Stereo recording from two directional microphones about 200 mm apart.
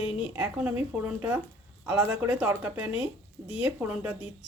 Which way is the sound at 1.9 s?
10° right (ahead or behind).